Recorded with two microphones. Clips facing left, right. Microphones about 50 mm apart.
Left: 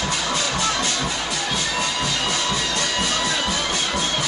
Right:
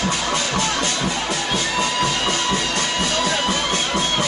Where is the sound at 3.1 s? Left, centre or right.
Right.